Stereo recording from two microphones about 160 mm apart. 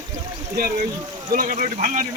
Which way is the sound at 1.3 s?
60° right (ahead or behind).